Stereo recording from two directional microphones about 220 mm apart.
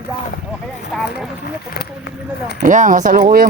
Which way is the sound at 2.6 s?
35° right (ahead or behind).